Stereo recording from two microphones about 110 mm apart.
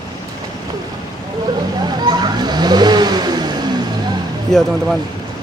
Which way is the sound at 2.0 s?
40° right (ahead or behind).